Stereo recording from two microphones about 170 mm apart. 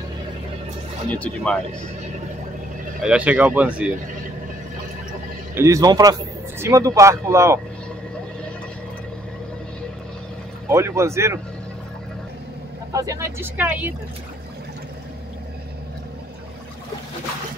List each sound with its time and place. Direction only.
1.1 s speech: 5° left (ahead or behind)
3.0 s speech: 5° right (ahead or behind)
5.5 s speech: 15° right (ahead or behind)
10.7 s speech: 15° right (ahead or behind)
12.9 s speech: 20° right (ahead or behind)